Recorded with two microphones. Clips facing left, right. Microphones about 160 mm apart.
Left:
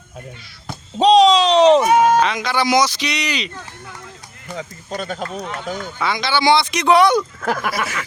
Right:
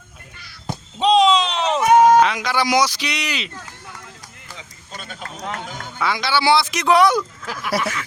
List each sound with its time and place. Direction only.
0.9 s a sound: 40° left (ahead or behind)
2.0 s speech: 10° right (ahead or behind)
4.5 s speech: 45° left (ahead or behind)
6.0 s speech: 10° right (ahead or behind)
7.4 s speech: 55° left (ahead or behind)